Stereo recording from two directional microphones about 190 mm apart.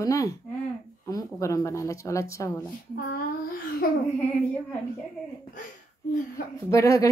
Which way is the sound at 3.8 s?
50° left (ahead or behind).